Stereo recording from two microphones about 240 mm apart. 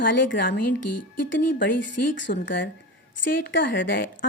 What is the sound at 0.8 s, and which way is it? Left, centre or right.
Speech, left.